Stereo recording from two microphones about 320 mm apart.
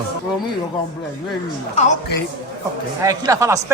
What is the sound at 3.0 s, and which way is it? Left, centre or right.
Speech, centre.